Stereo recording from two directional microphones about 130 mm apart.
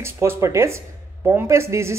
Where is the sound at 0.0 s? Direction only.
20° right (ahead or behind).